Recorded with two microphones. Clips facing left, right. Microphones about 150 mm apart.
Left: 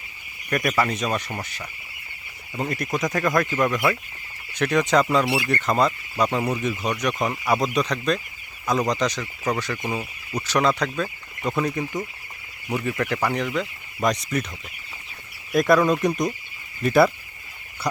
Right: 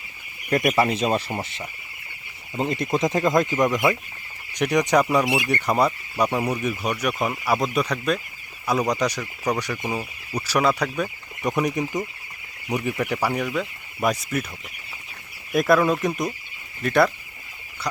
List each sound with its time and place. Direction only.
0.5 s speech: 25° right (ahead or behind); by 14.4 s 5° right (ahead or behind)
15.5 s speech: centre (ahead or behind)